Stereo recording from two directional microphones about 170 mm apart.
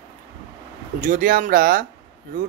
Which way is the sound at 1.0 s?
50° right (ahead or behind).